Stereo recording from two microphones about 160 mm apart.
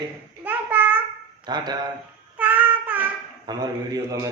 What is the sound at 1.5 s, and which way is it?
Speech, 25° right (ahead or behind).